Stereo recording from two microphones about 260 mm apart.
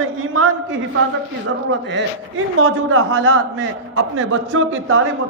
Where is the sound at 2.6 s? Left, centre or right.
Right.